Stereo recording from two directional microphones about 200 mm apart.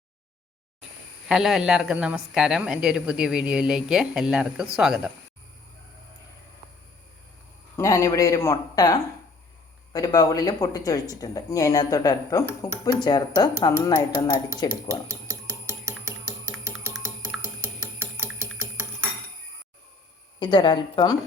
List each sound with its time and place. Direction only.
1.3 s a woman's voice: centre (ahead or behind)
7.8 s speech: 15° left (ahead or behind)
16.9 s music: 15° right (ahead or behind)
20.4 s speech: 20° left (ahead or behind)